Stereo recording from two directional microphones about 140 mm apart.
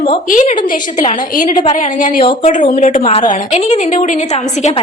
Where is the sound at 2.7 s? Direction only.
60° left (ahead or behind).